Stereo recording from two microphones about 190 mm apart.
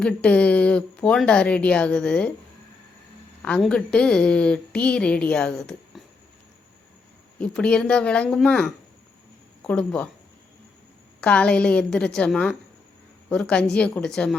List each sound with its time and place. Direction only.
0.0 s a woman's voice: 5° left (ahead or behind)
3.4 s a woman's voice: 5° left (ahead or behind)
7.3 s a woman's voice: 5° left (ahead or behind)
11.2 s a woman's voice: 5° left (ahead or behind)